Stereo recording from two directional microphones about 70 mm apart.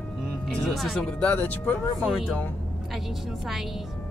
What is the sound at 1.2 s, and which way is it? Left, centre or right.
Speech, left.